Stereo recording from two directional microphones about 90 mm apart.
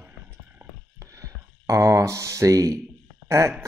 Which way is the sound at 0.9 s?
35° right (ahead or behind).